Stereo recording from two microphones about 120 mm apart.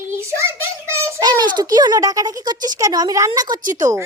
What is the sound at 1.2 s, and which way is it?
A child's voice, 35° right (ahead or behind).